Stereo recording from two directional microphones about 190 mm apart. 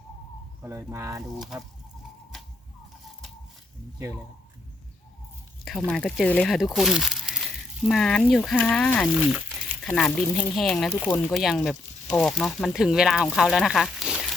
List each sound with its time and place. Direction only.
0.6 s speech: 15° right (ahead or behind)
1.4 s speech: centre (ahead or behind)
2.3 s a sound: 5° left (ahead or behind)
5.6 s speech: 5° left (ahead or behind)